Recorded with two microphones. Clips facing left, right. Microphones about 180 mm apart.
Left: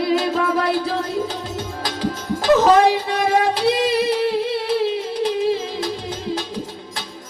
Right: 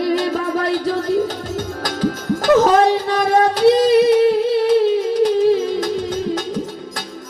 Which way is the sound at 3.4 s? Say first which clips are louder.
Right 9 dB; 40° right (ahead or behind).